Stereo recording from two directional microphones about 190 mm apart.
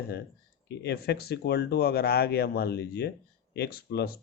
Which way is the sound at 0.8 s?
60° left (ahead or behind).